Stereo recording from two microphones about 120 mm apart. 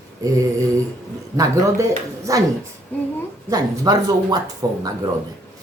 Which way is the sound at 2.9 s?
10° left (ahead or behind).